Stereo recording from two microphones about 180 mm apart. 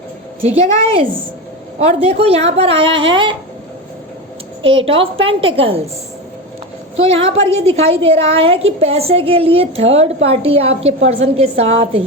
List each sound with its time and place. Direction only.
0.4 s a woman's voice: 35° right (ahead or behind)
4.9 s a woman's voice: 30° right (ahead or behind)
7.2 s a woman's voice: 30° right (ahead or behind)